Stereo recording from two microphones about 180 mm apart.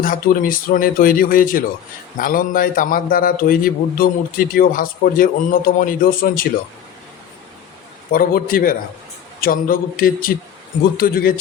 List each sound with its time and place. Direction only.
0.0 s a man's voice: 50° left (ahead or behind)
8.1 s a man's voice: 50° left (ahead or behind)